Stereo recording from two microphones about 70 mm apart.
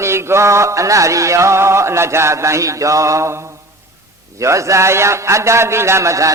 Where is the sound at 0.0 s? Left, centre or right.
Right.